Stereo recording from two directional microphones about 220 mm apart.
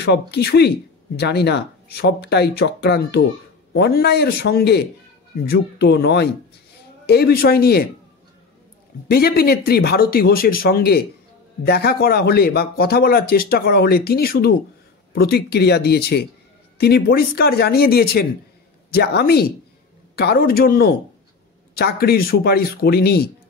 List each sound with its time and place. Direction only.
0.0 s speech: 50° left (ahead or behind)
9.1 s speech: 45° left (ahead or behind)